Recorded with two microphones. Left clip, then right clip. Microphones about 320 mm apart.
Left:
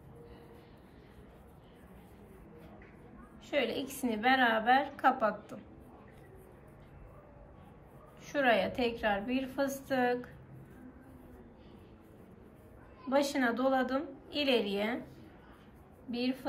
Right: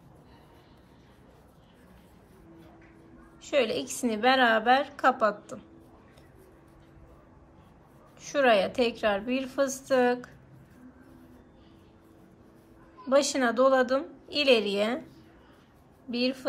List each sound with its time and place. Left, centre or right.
3.4 s a woman's voice: centre
8.2 s a woman's voice: centre
13.1 s a woman's voice: centre
16.1 s a woman's voice: centre